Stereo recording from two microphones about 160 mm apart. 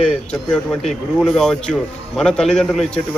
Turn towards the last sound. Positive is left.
turn(degrees=5)  # may be behind; listen again after turning